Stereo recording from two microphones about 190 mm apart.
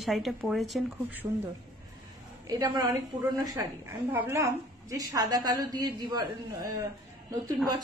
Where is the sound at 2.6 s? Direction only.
20° right (ahead or behind).